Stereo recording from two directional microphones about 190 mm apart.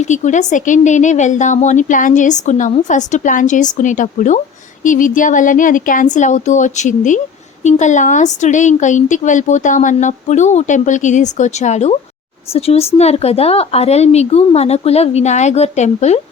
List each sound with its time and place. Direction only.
0.0 s a woman's voice: 40° left (ahead or behind)